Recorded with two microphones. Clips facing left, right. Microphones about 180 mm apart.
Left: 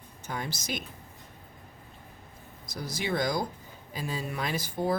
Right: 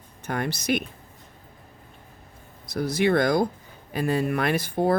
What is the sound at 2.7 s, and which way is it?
Speech, 60° right (ahead or behind).